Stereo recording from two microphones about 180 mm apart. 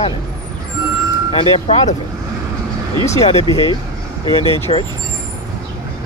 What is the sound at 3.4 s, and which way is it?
Speech, 25° right (ahead or behind).